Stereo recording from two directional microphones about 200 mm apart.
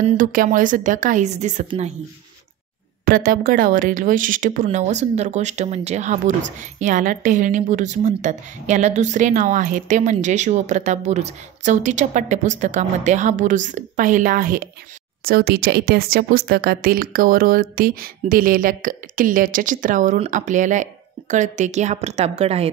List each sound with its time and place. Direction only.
0.0 s a woman's voice: 45° right (ahead or behind)
3.1 s a woman's voice: 45° right (ahead or behind); by 22.7 s 30° right (ahead or behind)